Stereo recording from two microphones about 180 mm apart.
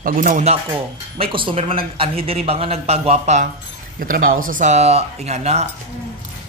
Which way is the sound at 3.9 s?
50° right (ahead or behind).